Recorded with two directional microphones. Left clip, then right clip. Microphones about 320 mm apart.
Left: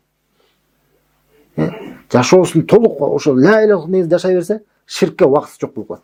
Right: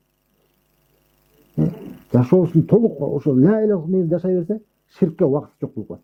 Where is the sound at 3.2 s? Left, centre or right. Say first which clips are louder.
Left 6 dB; centre.